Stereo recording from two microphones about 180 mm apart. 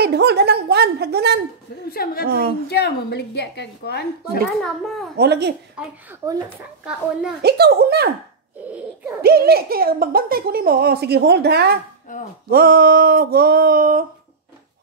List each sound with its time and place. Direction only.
0.0 s speech: 65° right (ahead or behind)
1.9 s a woman's voice: 55° left (ahead or behind)
2.2 s speech: 55° right (ahead or behind)
2.7 s a woman's voice: 65° left (ahead or behind)
4.6 s a child's voice: centre (ahead or behind)
5.1 s speech: 65° right (ahead or behind)
6.8 s a child's voice: 5° right (ahead or behind)
7.4 s speech: 60° right (ahead or behind)
8.6 s a sound: 10° right (ahead or behind)
9.2 s speech: 60° right (ahead or behind)
12.1 s speech: 45° left (ahead or behind)
12.4 s speech: 55° right (ahead or behind)